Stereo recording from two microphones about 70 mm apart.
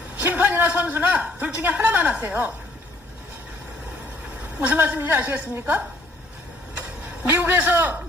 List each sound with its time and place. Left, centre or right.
0.2 s a sound: right
1.6 s a woman's voice: right
4.6 s a woman's voice: right
7.3 s a woman's voice: right